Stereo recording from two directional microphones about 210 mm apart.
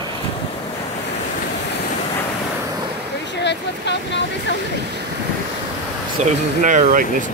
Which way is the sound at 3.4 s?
55° left (ahead or behind).